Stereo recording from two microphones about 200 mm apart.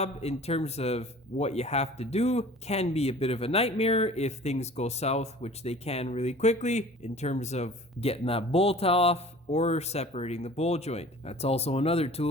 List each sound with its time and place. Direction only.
0.0 s speech: 30° left (ahead or behind)